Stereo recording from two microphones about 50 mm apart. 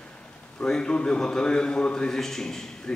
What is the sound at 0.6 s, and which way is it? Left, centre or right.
A man's voice, centre.